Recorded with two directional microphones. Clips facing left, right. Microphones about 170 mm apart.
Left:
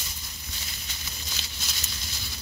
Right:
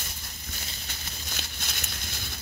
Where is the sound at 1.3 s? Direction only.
55° right (ahead or behind).